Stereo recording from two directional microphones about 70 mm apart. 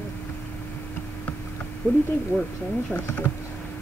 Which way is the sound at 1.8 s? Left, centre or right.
Left.